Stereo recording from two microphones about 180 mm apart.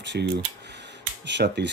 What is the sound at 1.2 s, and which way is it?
Speech, 75° right (ahead or behind).